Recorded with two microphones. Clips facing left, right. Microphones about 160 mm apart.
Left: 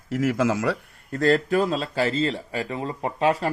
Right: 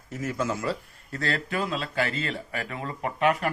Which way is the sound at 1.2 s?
40° left (ahead or behind).